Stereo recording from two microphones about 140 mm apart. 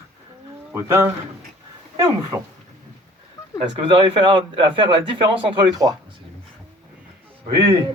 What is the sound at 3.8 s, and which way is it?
A man's voice, 35° right (ahead or behind).